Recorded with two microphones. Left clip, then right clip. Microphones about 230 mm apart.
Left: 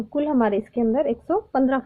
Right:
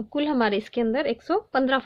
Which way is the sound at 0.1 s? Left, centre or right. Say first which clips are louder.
Left 2 dB; right.